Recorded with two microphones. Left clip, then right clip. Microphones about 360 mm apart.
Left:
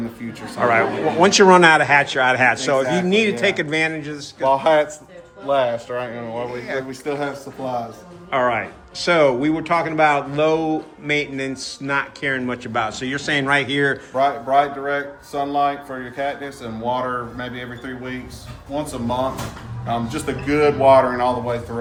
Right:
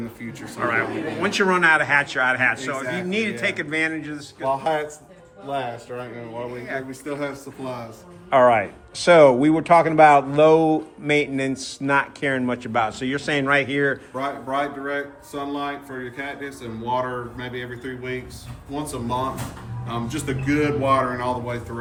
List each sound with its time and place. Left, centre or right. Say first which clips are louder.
0.6 s speech: left 6 dB; centre
4.4 s speech: left 7 dB; left
8.3 s speech: right 4 dB; centre
14.2 s speech: left 12 dB; centre
19.9 s speech: left 5 dB; centre